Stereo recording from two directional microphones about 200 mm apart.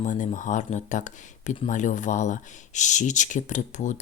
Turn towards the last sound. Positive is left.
turn(degrees=40)  # may be behind; listen again after turning